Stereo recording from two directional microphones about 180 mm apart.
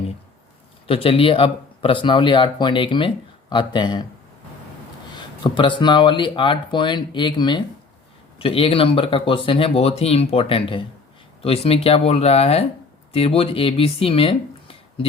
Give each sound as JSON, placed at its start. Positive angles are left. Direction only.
{"t": 0.9, "sound": "speech", "side_deg": 30}
{"t": 5.4, "sound": "speech", "side_deg": 25}